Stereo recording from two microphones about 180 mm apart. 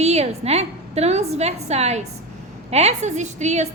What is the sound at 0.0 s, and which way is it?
A woman's voice, 35° right (ahead or behind).